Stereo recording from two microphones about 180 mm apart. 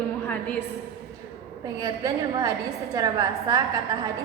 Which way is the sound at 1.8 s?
20° right (ahead or behind).